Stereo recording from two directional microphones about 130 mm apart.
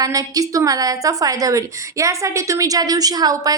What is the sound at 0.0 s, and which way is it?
A woman's voice, 25° right (ahead or behind).